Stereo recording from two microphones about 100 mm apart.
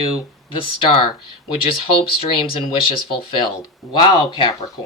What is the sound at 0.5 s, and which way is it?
Speech, 60° left (ahead or behind).